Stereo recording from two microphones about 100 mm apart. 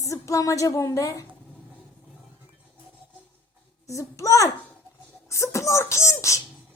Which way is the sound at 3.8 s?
30° left (ahead or behind).